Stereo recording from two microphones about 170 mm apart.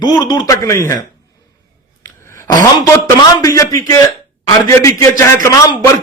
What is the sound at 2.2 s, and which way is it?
A man's voice, 15° left (ahead or behind).